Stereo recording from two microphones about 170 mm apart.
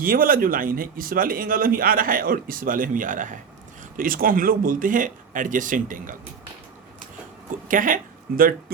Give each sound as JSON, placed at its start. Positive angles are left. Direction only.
{"t": 0.0, "sound": "speech", "side_deg": -55}
{"t": 7.7, "sound": "speech", "side_deg": -50}